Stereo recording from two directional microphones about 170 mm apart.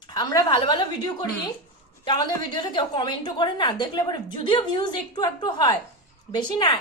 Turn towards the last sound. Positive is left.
turn(degrees=25)  # may be behind; listen again after turning